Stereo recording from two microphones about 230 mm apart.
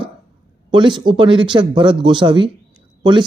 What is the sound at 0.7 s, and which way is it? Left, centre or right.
Speech, centre.